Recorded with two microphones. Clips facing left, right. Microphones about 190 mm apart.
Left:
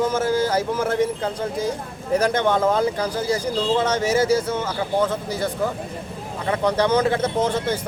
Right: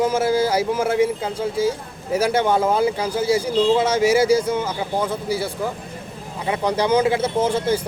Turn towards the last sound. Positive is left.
turn(degrees=-10)  # may be behind; listen again after turning